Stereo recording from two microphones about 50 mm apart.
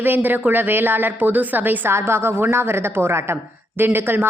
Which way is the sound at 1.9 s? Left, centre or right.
Right.